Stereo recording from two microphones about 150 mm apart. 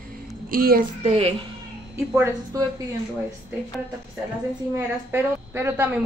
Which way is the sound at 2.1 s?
15° right (ahead or behind).